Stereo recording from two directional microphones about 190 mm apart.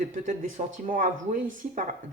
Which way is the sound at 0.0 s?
45° right (ahead or behind).